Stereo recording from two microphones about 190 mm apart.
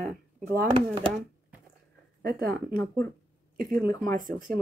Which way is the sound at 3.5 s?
45° right (ahead or behind).